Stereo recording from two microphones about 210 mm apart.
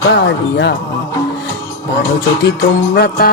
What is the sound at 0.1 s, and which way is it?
Speech, 55° left (ahead or behind).